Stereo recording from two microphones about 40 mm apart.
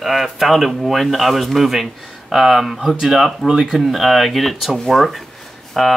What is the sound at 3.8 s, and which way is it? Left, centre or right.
Speech, centre.